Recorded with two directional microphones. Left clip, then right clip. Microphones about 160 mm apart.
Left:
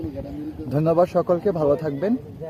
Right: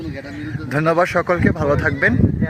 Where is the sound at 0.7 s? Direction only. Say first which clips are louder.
Right 3 dB; 25° right (ahead or behind).